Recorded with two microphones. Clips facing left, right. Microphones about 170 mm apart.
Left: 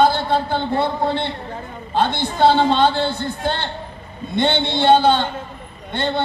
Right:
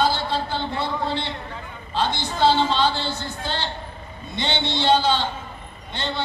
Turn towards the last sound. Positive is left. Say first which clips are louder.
# left 7 dB
turn(degrees=55)  # may be behind; listen again after turning